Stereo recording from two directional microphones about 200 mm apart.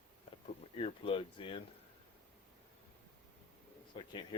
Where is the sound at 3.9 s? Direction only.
25° left (ahead or behind).